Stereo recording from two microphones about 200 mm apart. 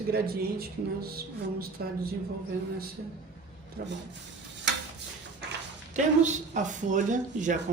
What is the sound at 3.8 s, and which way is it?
Speech, 45° right (ahead or behind).